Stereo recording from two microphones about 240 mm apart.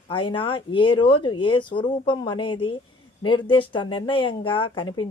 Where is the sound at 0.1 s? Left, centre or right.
Left.